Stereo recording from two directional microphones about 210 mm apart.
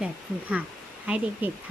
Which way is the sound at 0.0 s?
5° right (ahead or behind).